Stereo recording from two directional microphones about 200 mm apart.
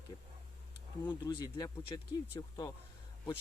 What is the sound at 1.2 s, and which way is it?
Speech, 20° left (ahead or behind).